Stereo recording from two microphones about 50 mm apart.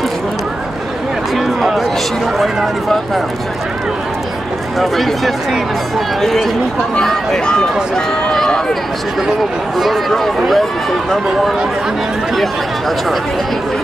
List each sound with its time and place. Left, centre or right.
1.3 s a sound: centre
2.3 s speech: centre
4.7 s speech: centre
9.8 s speech: centre